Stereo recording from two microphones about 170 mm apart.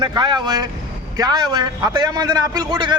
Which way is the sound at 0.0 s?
25° right (ahead or behind).